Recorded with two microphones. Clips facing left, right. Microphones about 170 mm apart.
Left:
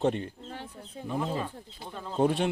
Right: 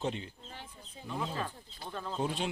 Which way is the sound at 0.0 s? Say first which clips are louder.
Left 8 dB; 55° left (ahead or behind).